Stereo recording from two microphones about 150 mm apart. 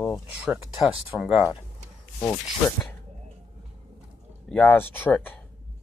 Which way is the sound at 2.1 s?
20° left (ahead or behind).